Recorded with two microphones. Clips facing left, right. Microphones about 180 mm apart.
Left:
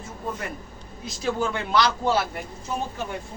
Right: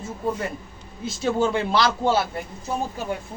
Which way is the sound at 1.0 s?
25° right (ahead or behind).